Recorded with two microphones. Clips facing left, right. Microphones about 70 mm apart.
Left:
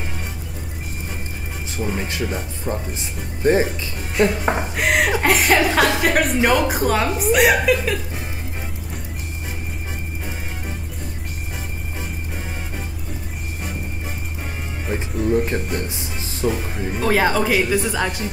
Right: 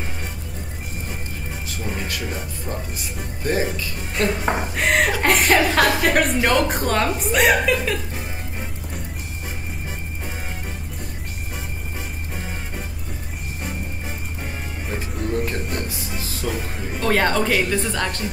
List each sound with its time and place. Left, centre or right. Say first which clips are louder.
1.7 s speech: left 4 dB; left
4.2 s a woman's voice: left 3 dB; centre
15.0 s music: left 5 dB; left
16.4 s a woman's voice: left 6 dB; centre